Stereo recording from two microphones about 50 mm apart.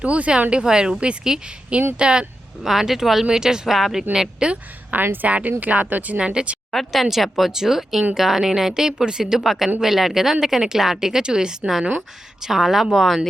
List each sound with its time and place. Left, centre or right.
0.0 s a woman's voice: right
2.6 s a woman's voice: centre
4.1 s a woman's voice: centre
5.0 s speech: right
6.1 s speech: centre
6.7 s a woman's voice: centre